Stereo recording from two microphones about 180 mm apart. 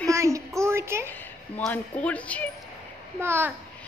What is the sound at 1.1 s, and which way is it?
Speech, 10° left (ahead or behind).